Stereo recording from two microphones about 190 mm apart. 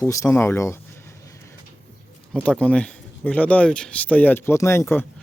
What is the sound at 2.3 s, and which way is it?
Speech, 5° left (ahead or behind).